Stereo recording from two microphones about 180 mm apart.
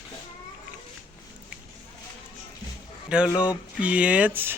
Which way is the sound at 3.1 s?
5° right (ahead or behind).